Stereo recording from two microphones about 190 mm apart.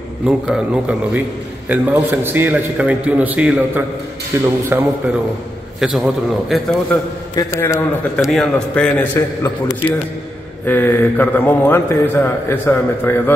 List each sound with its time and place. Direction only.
0.2 s a man's voice: 5° right (ahead or behind)
5.8 s a man's voice: centre (ahead or behind)
7.3 s a man's voice: 15° left (ahead or behind)
8.3 s a man's voice: 5° left (ahead or behind)